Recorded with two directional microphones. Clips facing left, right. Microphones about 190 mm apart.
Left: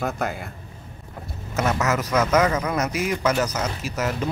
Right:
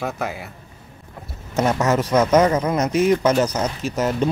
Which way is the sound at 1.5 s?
30° right (ahead or behind).